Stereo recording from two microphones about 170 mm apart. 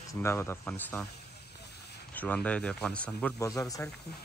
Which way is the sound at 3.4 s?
20° left (ahead or behind).